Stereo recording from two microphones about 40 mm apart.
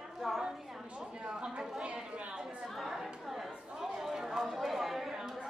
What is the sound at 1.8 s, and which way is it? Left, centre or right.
Chatter, right.